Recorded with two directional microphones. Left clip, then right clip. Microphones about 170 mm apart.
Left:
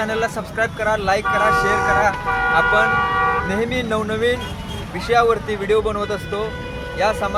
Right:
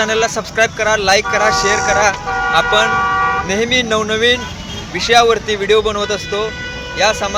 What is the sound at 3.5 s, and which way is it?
Speech, centre (ahead or behind).